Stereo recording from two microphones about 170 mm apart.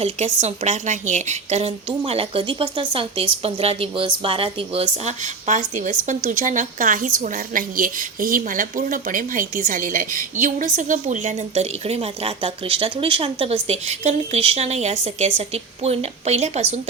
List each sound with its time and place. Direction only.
0.4 s a woman's voice: 45° right (ahead or behind)